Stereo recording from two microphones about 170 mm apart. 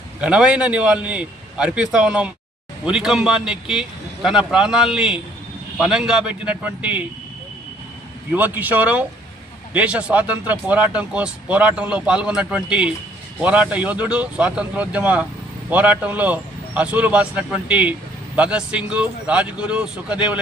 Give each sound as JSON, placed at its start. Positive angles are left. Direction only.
{"t": 0.2, "sound": "a man's voice", "side_deg": -5}
{"t": 8.3, "sound": "speech", "side_deg": -10}